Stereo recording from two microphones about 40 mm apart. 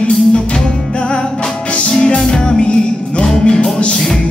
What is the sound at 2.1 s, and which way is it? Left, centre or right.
Music, centre.